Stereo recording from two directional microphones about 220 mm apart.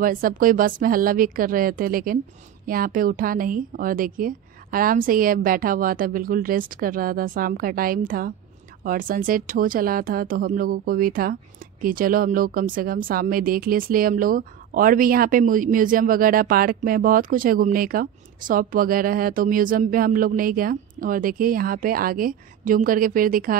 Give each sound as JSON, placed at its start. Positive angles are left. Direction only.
{"t": 0.0, "sound": "speech", "side_deg": -40}